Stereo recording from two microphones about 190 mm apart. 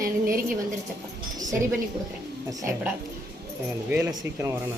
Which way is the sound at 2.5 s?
15° right (ahead or behind).